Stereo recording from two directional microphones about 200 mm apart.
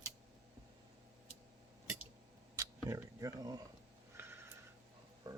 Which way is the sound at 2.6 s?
15° right (ahead or behind).